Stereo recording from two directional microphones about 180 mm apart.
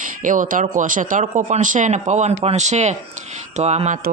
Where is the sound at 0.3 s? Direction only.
50° right (ahead or behind).